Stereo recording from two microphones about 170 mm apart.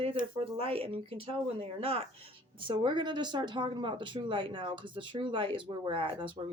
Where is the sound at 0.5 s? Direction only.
35° right (ahead or behind).